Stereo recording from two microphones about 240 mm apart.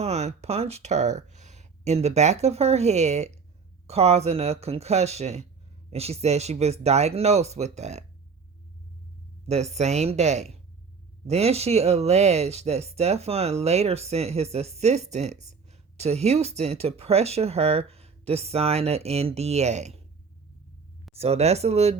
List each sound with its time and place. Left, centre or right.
0.0 s speech: right
9.5 s speech: right
21.2 s speech: right